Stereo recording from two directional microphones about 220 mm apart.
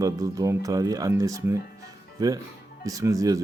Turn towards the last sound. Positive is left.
turn(degrees=-15)  # may be behind; listen again after turning